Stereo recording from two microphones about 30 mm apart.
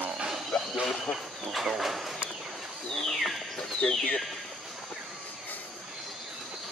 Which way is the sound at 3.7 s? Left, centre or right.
Left.